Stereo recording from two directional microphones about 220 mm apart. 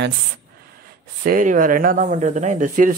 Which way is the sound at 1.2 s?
40° right (ahead or behind).